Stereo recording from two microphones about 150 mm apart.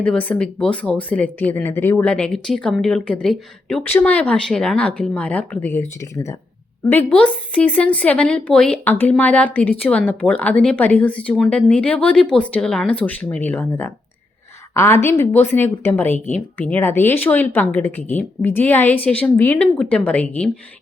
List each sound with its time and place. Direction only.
0.0 s speech: 10° left (ahead or behind)
6.9 s a woman's voice: 10° left (ahead or behind)